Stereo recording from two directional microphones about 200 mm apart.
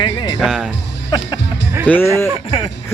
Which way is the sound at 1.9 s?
5° left (ahead or behind).